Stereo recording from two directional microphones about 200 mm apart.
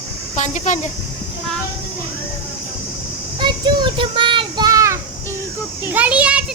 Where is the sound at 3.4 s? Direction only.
25° right (ahead or behind).